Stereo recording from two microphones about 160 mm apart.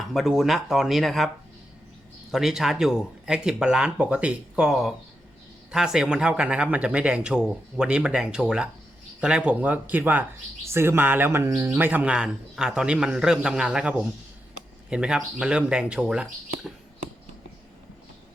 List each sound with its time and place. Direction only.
0.0 s speech: centre (ahead or behind)
2.3 s speech: centre (ahead or behind)